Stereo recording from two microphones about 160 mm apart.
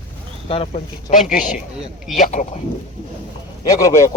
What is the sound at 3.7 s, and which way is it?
Speech, 20° left (ahead or behind).